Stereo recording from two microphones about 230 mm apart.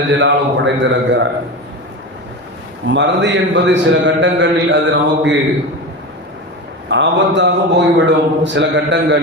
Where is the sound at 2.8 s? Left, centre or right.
Right.